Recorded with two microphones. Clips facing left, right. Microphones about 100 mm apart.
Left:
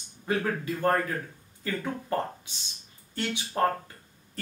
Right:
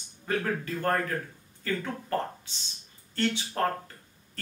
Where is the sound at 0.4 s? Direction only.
10° left (ahead or behind).